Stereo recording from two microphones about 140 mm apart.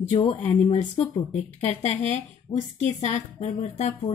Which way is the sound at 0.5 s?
50° left (ahead or behind).